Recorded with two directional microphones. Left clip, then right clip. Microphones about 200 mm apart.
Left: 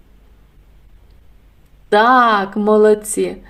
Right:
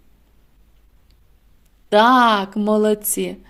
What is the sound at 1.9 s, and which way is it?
Speech, 30° right (ahead or behind).